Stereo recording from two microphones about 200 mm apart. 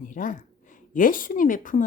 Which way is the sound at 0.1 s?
40° left (ahead or behind).